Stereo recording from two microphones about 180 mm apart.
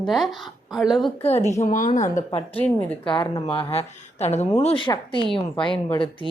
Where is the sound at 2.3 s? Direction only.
30° left (ahead or behind).